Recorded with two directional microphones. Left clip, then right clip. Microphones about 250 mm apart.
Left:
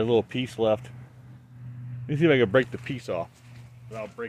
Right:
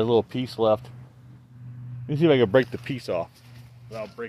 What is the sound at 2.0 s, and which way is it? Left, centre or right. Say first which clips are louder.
Speech: right 2 dB; centre.